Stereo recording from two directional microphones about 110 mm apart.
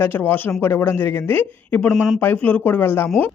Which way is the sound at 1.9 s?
5° right (ahead or behind).